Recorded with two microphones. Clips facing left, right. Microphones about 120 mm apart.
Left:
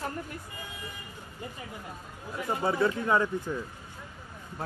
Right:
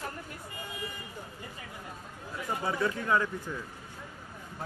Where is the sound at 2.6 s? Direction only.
25° left (ahead or behind).